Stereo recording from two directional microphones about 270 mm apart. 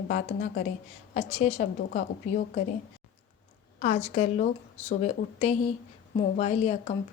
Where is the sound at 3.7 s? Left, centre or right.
Left.